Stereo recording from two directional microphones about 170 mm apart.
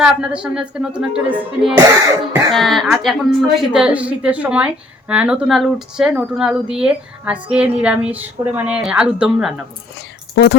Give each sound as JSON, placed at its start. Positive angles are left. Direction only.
{"t": 0.0, "sound": "a woman's voice", "side_deg": -5}
{"t": 10.3, "sound": "speech", "side_deg": 90}